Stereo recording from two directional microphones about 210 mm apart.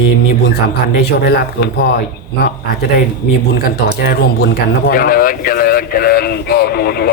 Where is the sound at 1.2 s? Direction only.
50° left (ahead or behind).